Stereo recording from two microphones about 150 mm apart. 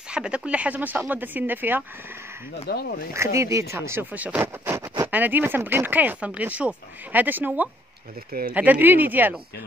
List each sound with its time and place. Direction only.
0.1 s speech: 5° right (ahead or behind)
2.7 s speech: 90° left
3.1 s speech: 20° right (ahead or behind)
8.3 s speech: 75° right (ahead or behind)
8.5 s speech: 10° right (ahead or behind)